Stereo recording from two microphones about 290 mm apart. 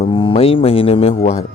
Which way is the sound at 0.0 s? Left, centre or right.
Centre.